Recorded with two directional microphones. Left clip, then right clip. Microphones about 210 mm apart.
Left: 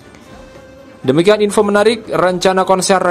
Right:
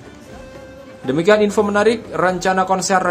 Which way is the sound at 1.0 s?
40° left (ahead or behind).